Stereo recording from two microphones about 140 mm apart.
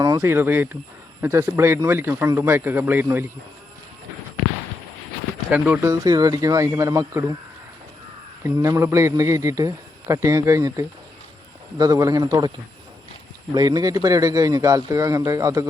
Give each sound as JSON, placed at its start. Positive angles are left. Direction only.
{"t": 0.0, "sound": "speech", "side_deg": -20}
{"t": 5.5, "sound": "speech", "side_deg": -10}
{"t": 5.9, "sound": "a man's voice", "side_deg": -25}
{"t": 8.4, "sound": "a man's voice", "side_deg": -20}
{"t": 13.5, "sound": "a man's voice", "side_deg": -30}